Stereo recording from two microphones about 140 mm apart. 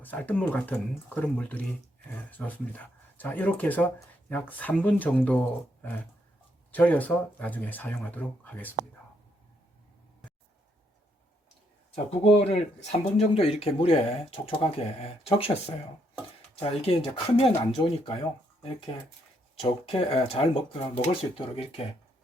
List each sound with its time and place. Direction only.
0.0 s speech: 10° left (ahead or behind)
12.2 s speech: 45° left (ahead or behind)
19.5 s speech: 40° left (ahead or behind)